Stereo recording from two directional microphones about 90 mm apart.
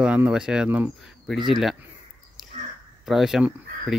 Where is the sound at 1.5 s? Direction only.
Centre (ahead or behind).